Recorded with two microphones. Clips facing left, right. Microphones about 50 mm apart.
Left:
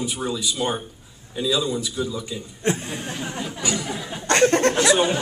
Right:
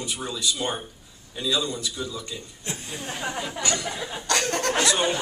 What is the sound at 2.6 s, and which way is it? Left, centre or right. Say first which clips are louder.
Speech: left 10 dB; left.